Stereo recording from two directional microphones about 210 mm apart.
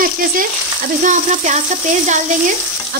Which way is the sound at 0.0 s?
40° right (ahead or behind).